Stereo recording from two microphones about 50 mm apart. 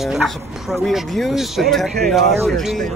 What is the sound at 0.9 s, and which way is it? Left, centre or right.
Speech, centre.